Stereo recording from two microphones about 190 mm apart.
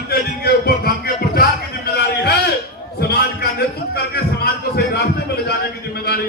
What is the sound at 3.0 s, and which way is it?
A man's voice, 55° left (ahead or behind).